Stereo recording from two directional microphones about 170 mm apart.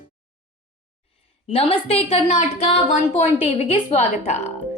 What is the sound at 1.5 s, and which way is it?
A woman's voice, 35° left (ahead or behind).